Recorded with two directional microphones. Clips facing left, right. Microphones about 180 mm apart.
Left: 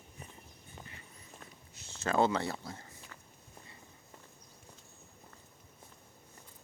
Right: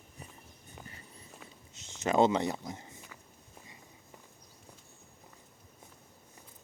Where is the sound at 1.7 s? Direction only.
20° right (ahead or behind).